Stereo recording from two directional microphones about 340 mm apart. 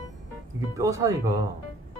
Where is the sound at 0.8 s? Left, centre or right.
Centre.